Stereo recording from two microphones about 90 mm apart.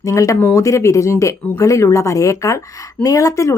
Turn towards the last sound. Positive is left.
turn(degrees=35)  # may be behind; listen again after turning